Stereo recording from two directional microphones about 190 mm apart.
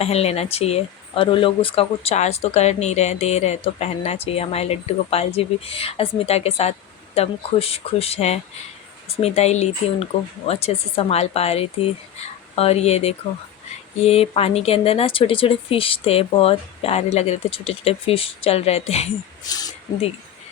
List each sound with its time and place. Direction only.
0.0 s speech: 35° left (ahead or behind)
19.5 s speech: 20° left (ahead or behind)